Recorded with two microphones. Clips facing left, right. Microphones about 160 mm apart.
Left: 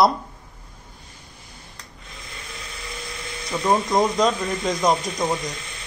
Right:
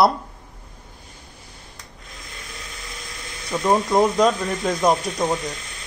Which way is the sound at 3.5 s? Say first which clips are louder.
Right 2 dB; centre (ahead or behind).